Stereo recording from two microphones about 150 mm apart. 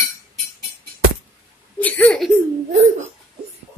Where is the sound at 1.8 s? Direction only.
10° left (ahead or behind).